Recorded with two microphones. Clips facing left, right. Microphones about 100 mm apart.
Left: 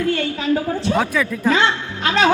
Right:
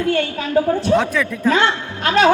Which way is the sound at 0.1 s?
50° right (ahead or behind).